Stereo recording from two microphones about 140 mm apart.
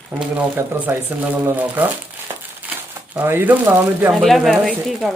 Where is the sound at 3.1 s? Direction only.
15° right (ahead or behind).